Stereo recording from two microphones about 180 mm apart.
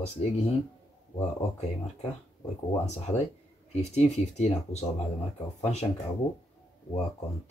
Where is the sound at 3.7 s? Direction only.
40° left (ahead or behind).